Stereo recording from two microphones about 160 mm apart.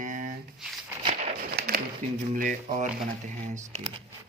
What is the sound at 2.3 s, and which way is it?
Speech, 55° right (ahead or behind).